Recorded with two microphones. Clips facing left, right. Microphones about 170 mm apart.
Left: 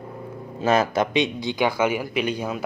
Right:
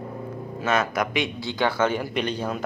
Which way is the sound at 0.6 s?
30° left (ahead or behind).